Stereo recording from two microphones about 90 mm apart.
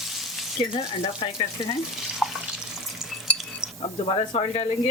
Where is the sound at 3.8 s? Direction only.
90° left.